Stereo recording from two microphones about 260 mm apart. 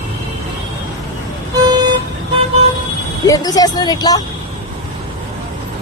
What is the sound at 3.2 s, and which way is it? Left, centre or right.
Speech, centre.